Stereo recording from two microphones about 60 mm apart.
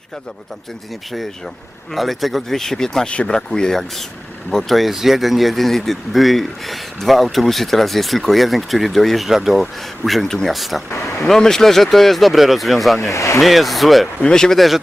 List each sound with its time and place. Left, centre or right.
1.9 s speech: centre
13.1 s speech: left
13.4 s speech: centre